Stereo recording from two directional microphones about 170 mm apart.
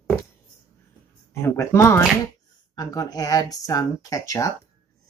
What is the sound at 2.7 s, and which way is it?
Speech, 20° left (ahead or behind).